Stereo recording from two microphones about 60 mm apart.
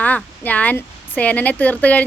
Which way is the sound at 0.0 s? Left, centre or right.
Left.